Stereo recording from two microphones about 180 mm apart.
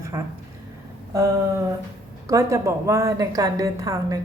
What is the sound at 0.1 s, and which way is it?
A woman's voice, 15° right (ahead or behind).